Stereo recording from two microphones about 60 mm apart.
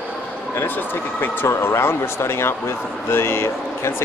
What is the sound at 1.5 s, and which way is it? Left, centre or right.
Speech, left.